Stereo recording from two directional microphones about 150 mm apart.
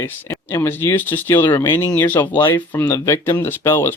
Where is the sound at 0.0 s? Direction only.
15° left (ahead or behind).